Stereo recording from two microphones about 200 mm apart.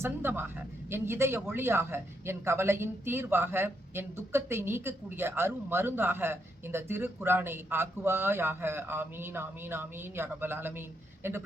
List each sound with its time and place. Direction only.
0.0 s speech: 10° right (ahead or behind)